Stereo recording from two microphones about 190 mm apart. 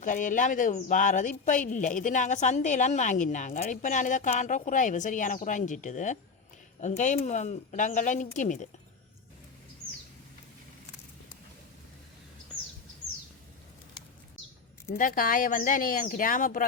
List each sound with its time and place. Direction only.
0.0 s speech: 45° left (ahead or behind)
14.9 s speech: 45° left (ahead or behind)